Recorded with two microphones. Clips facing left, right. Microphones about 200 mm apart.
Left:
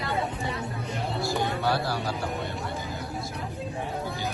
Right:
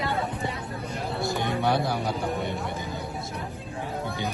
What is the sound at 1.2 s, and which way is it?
Music, 20° right (ahead or behind).